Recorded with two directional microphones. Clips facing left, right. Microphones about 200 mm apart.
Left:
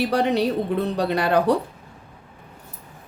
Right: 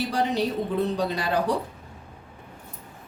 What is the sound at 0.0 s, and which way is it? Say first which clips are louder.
A woman's voice: left 5 dB; 65° left (ahead or behind).